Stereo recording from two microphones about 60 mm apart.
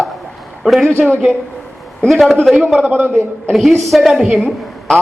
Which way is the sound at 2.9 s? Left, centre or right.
Right.